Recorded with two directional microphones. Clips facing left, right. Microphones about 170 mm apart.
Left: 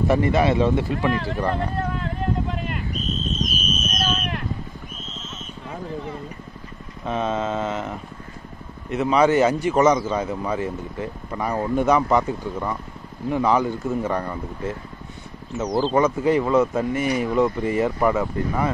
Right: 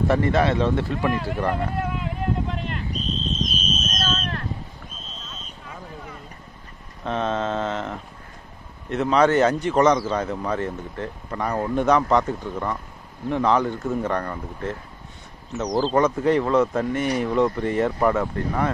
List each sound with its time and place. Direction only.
0.1 s speech: 10° left (ahead or behind)
1.1 s a sound: 10° right (ahead or behind); by 5.5 s 20° left (ahead or behind)
7.1 s speech: 5° left (ahead or behind)
15.8 s speech: 5° left (ahead or behind)